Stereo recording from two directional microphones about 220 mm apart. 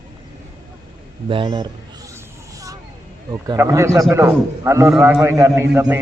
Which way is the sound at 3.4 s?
15° right (ahead or behind).